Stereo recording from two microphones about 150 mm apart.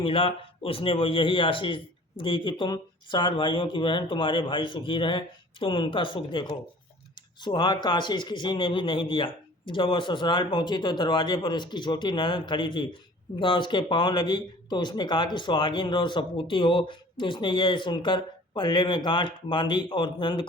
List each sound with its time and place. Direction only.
0.0 s speech: 35° left (ahead or behind)